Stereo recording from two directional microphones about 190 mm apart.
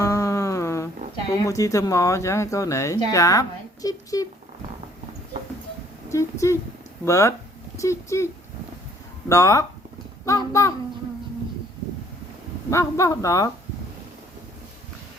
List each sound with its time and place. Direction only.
0.0 s music: 15° left (ahead or behind)
1.5 s speech: 15° left (ahead or behind)
6.1 s speech: 15° left (ahead or behind)
9.3 s speech: 15° left (ahead or behind)
12.7 s speech: 15° left (ahead or behind)